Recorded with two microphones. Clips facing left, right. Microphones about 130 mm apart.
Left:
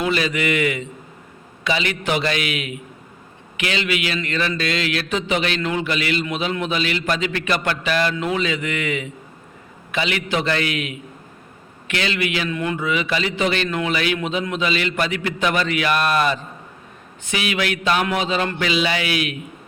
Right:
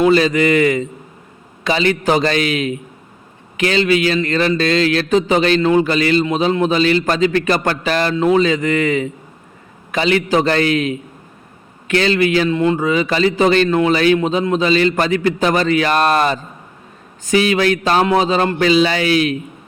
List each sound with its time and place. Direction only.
0.0 s speech: 35° right (ahead or behind)